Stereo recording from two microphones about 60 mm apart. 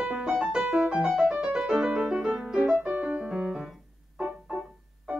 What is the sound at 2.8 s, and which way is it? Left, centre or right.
Music, right.